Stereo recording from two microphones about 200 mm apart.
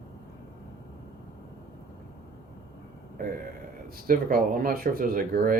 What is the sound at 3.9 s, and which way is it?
Speech, 45° right (ahead or behind).